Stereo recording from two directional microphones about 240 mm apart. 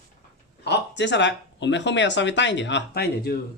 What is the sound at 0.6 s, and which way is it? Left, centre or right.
Speech, left.